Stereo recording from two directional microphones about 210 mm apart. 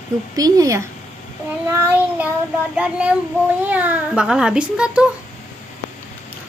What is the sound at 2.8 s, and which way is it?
A woman's voice, 5° right (ahead or behind).